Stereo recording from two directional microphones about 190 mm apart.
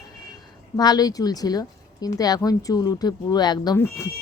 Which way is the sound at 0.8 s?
20° left (ahead or behind).